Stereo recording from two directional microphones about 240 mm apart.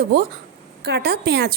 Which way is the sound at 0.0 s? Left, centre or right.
Right.